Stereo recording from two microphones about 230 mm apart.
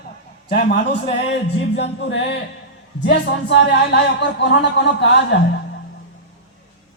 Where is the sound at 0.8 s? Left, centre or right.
Left.